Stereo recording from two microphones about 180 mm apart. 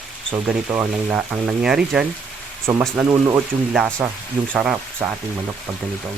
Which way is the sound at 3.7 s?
5° right (ahead or behind).